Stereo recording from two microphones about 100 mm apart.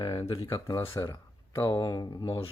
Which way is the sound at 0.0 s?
40° left (ahead or behind).